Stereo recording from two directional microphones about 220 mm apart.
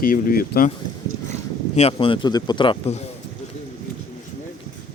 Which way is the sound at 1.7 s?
25° left (ahead or behind).